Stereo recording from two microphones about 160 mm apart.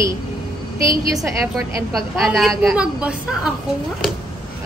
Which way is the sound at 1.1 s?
Centre (ahead or behind).